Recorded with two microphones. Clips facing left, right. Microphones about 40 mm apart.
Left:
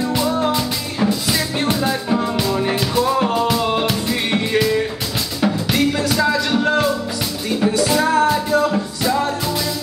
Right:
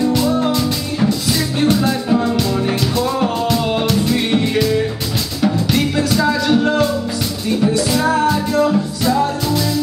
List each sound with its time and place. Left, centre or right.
0.1 s music: centre